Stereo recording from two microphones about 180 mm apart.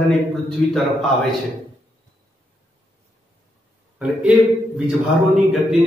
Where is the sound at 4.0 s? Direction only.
5° right (ahead or behind).